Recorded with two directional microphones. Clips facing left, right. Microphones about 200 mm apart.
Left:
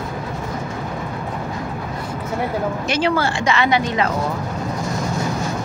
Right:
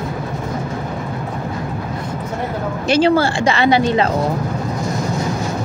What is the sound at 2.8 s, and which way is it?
Speech, 30° right (ahead or behind).